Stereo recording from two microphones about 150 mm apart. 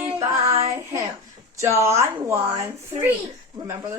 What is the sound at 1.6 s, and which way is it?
Speech, 20° right (ahead or behind).